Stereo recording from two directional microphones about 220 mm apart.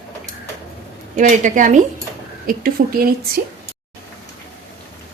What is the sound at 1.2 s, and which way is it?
A woman's voice, 35° right (ahead or behind).